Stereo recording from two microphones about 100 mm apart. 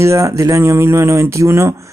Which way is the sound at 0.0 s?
30° right (ahead or behind).